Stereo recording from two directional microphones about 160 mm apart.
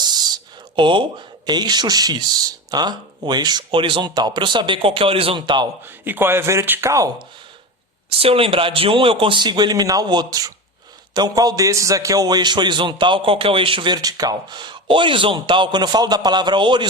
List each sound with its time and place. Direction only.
0.8 s a man's voice: 30° right (ahead or behind)
5.8 s speech: 15° right (ahead or behind)
8.2 s a man's voice: 35° right (ahead or behind)